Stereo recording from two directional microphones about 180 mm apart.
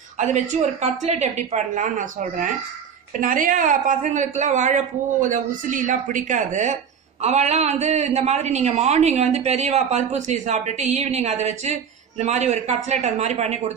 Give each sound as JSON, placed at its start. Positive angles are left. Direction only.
{"t": 0.2, "sound": "a woman's voice", "side_deg": -40}